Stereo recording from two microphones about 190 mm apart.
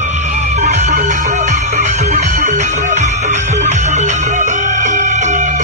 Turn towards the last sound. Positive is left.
turn(degrees=-40)  # may be behind; listen again after turning